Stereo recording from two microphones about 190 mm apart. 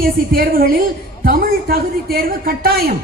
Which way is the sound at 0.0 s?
50° right (ahead or behind).